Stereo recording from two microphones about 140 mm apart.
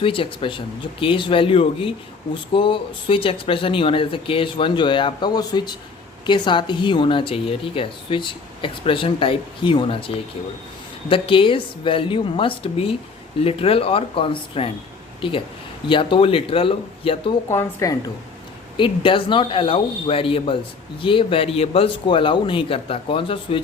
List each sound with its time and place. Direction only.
0.0 s speech: 40° left (ahead or behind)
11.1 s speech: 40° left (ahead or behind)
17.5 s a woman's voice: 20° left (ahead or behind)
18.8 s speech: 35° left (ahead or behind)